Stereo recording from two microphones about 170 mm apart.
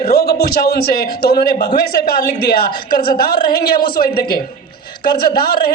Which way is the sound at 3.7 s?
60° left (ahead or behind).